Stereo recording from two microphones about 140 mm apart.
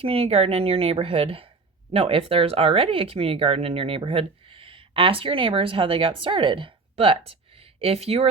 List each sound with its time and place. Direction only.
0.0 s speech: 45° right (ahead or behind)